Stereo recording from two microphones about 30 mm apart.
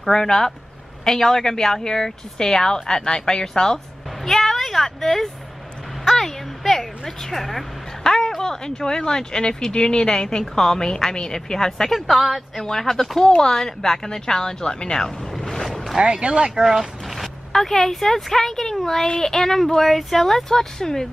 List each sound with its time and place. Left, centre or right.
0.1 s a woman's voice: centre
4.3 s a sound: centre
8.0 s a sound: left
8.4 s a woman's voice: left
11.9 s a woman's voice: centre
12.5 s a woman's voice: centre; by 15.0 s left
15.4 s boat: centre
16.0 s speech: right
16.6 s boat: centre
17.5 s speech: centre